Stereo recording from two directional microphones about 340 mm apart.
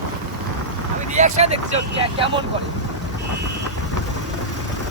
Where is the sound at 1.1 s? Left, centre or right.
Centre.